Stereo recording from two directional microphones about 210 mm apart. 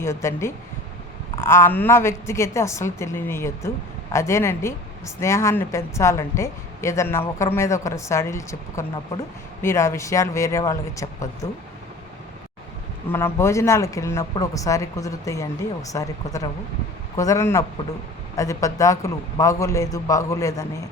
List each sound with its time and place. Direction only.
0.0 s speech: 15° left (ahead or behind)
13.1 s speech: 10° left (ahead or behind)